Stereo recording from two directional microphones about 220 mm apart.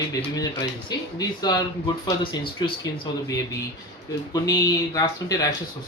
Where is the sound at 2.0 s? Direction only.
20° left (ahead or behind).